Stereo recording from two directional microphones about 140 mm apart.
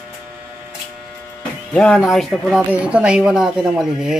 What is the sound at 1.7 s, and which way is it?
Speech, 5° left (ahead or behind).